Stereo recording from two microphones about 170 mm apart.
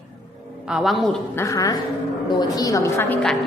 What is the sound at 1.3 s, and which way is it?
A woman's voice, 15° left (ahead or behind).